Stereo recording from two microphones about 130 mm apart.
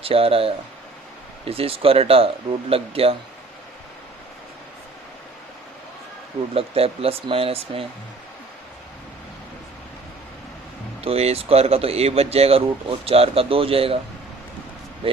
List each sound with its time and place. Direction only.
0.0 s speech: 45° right (ahead or behind)
6.5 s speech: 45° right (ahead or behind)
11.0 s speech: 50° right (ahead or behind)
15.0 s a sound: 45° right (ahead or behind)